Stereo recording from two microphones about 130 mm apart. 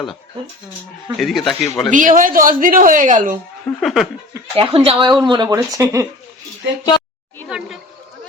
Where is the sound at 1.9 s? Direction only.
90° right.